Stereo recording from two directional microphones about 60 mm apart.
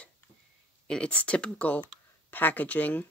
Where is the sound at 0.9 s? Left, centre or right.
Centre.